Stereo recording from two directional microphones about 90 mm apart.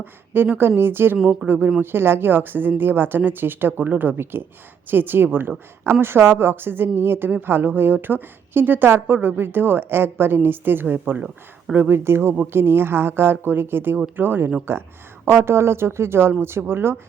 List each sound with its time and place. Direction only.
0.0 s a woman's voice: 20° right (ahead or behind)
11.7 s a woman's voice: 25° right (ahead or behind)